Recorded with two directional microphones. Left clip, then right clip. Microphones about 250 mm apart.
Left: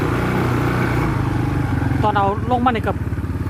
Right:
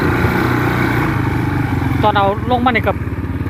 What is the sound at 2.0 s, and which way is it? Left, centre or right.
Speech, centre.